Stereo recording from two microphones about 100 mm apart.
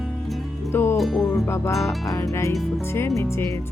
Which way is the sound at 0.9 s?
Centre (ahead or behind).